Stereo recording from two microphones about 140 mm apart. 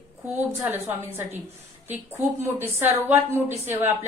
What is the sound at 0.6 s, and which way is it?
Speech, 15° right (ahead or behind).